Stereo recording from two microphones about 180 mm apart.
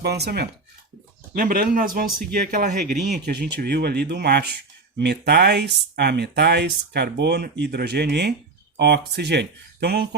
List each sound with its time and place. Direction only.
0.0 s speech: 65° right (ahead or behind)
1.3 s a man's voice: 50° right (ahead or behind)
3.2 s speech: 65° right (ahead or behind)